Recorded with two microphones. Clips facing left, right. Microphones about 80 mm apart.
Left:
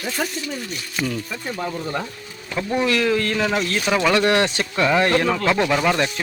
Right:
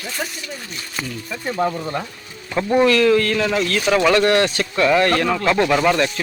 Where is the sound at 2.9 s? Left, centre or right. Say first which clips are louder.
Right 5 dB; centre.